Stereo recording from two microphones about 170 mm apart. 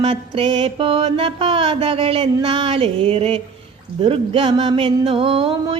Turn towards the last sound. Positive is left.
turn(degrees=-30)  # may be behind; listen again after turning